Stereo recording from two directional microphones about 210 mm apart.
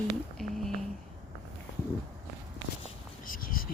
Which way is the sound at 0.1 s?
Centre (ahead or behind).